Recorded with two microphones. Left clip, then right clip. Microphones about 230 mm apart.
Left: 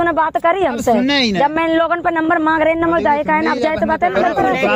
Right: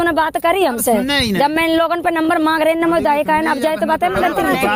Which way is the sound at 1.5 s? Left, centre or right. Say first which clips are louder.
Even; right.